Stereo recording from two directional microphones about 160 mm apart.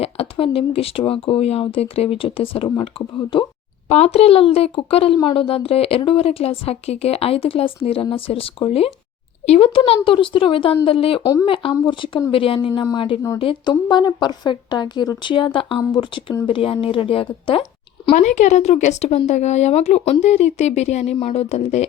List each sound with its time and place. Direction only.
0.0 s speech: 35° left (ahead or behind)
11.2 s a woman's voice: 20° left (ahead or behind)
11.4 s a woman's voice: 35° left (ahead or behind)
18.1 s speech: 50° left (ahead or behind)